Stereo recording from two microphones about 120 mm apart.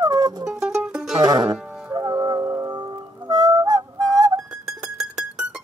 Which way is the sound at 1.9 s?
30° right (ahead or behind).